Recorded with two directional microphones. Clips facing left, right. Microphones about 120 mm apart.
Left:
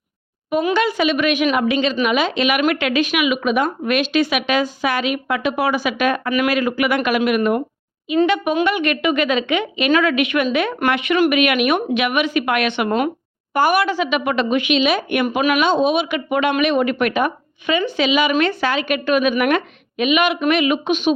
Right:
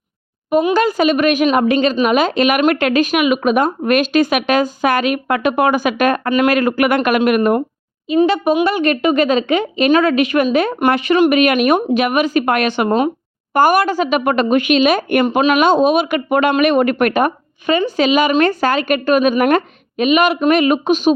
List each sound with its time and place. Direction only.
0.7 s speech: 40° right (ahead or behind)
8.6 s speech: 35° right (ahead or behind)